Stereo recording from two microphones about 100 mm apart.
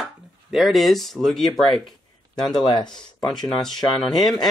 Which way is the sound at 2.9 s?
5° left (ahead or behind).